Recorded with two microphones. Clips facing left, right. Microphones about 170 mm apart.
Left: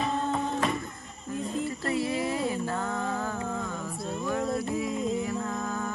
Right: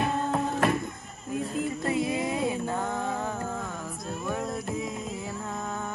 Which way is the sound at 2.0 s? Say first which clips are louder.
Right 1 dB; 20° right (ahead or behind).